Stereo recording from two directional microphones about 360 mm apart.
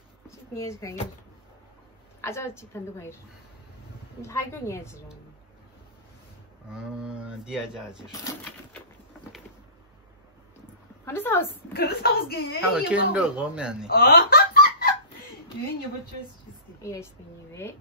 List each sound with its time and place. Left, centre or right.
0.3 s a woman's voice: centre
2.2 s a woman's voice: centre
4.2 s a woman's voice: centre
6.7 s speech: centre
8.1 s a woman's voice: centre
11.1 s a woman's voice: centre
11.7 s speech: left
12.7 s speech: centre
13.8 s laughter: left
16.8 s a woman's voice: centre